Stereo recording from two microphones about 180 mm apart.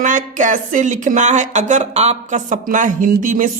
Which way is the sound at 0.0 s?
45° right (ahead or behind).